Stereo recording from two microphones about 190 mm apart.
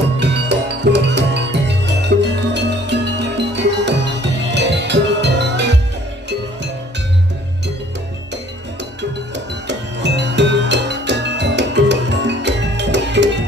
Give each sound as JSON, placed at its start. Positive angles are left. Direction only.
{"t": 0.2, "sound": "music", "side_deg": -65}
{"t": 9.7, "sound": "music", "side_deg": -65}